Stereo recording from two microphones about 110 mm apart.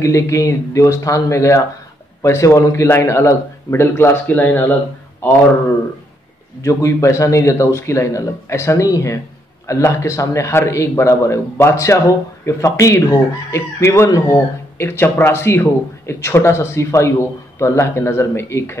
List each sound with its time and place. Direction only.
0.0 s speech: 30° left (ahead or behind)
6.6 s speech: 30° left (ahead or behind)